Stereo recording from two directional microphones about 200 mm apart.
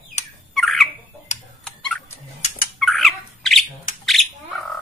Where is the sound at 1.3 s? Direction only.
35° left (ahead or behind).